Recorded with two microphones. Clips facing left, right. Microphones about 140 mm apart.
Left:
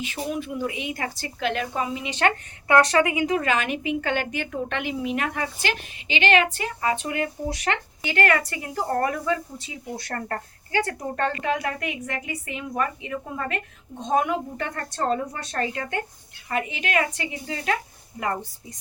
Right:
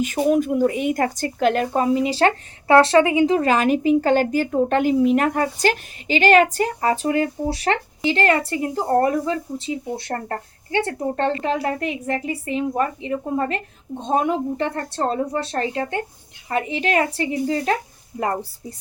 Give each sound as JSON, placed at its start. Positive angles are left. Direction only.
{"t": 0.0, "sound": "a woman's voice", "side_deg": -45}